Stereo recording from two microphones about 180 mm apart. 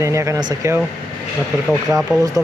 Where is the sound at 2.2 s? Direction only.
20° right (ahead or behind).